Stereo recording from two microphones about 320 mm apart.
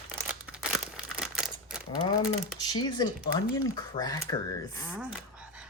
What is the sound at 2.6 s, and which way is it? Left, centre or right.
Speech, centre.